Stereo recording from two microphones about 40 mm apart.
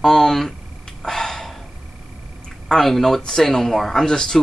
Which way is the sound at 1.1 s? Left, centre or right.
Centre.